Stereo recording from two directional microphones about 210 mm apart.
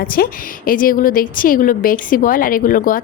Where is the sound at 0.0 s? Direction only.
45° left (ahead or behind).